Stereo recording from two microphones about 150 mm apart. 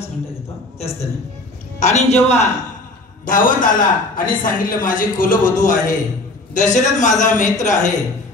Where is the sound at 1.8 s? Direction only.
50° left (ahead or behind).